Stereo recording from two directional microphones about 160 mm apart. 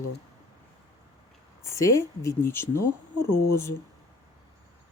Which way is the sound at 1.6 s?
20° left (ahead or behind).